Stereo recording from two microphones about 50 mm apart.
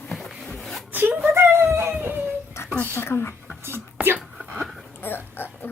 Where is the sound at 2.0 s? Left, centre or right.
Right.